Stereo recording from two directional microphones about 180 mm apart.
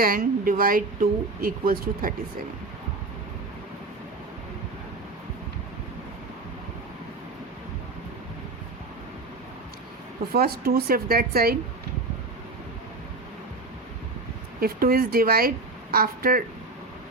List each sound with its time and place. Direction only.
0.0 s speech: 50° right (ahead or behind)
10.3 s speech: 60° right (ahead or behind)
14.6 s speech: 55° right (ahead or behind)